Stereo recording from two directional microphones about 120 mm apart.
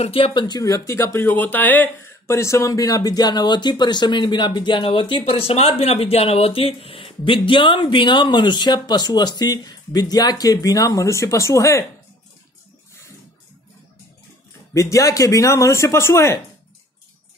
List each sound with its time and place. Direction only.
0.0 s speech: 50° left (ahead or behind); by 11.8 s 25° left (ahead or behind)
14.7 s speech: 25° left (ahead or behind)